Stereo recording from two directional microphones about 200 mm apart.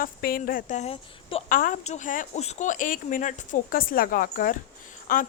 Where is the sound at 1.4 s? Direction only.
45° left (ahead or behind).